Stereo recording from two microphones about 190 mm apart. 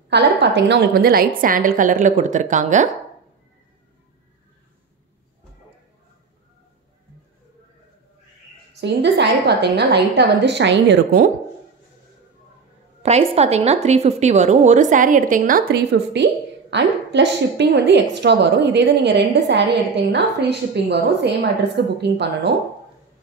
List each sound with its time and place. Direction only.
0.1 s a woman's voice: 65° right (ahead or behind); by 2.9 s 40° right (ahead or behind)
8.8 s a woman's voice: 65° right (ahead or behind)
13.0 s a woman's voice: 35° right (ahead or behind)
16.1 s a woman's voice: 70° right (ahead or behind)